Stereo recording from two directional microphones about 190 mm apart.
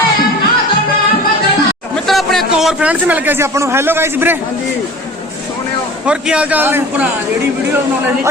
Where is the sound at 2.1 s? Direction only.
Centre (ahead or behind).